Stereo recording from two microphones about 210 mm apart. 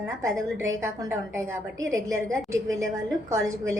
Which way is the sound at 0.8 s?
15° right (ahead or behind).